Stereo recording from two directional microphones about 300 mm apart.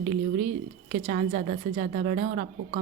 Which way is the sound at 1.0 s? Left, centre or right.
Right.